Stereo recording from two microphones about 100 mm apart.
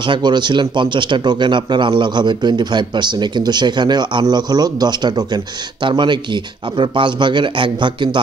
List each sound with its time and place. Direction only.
0.0 s speech: 50° right (ahead or behind)